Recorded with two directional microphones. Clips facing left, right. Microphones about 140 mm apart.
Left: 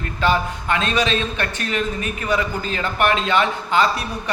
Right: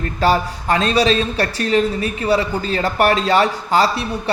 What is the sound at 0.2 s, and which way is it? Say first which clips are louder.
Speech: right 3 dB; 35° right (ahead or behind).